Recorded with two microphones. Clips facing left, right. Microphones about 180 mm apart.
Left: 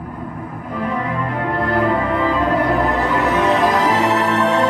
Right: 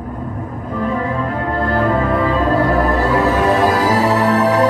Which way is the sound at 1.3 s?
20° left (ahead or behind).